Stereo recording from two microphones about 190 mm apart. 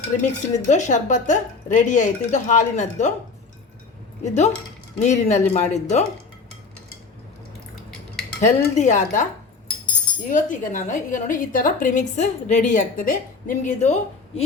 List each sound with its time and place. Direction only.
0.2 s a woman's voice: 40° left (ahead or behind)
4.2 s a woman's voice: 35° left (ahead or behind)
8.4 s a woman's voice: 40° left (ahead or behind)
10.2 s a woman's voice: 40° left (ahead or behind)